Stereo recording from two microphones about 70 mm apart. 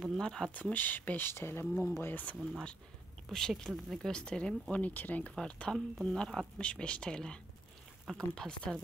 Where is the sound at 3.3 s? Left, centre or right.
Centre.